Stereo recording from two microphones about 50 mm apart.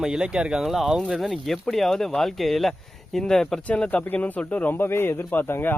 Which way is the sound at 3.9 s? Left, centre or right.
Left.